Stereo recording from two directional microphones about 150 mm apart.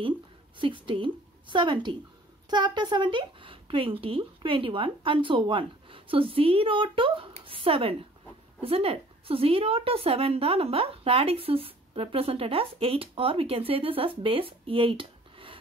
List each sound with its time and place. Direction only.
0.6 s a woman's voice: 35° right (ahead or behind)